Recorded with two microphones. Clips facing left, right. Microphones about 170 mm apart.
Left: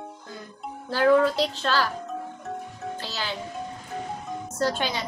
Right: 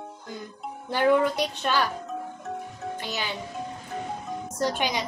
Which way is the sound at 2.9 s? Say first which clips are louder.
Right 2 dB; 15° right (ahead or behind).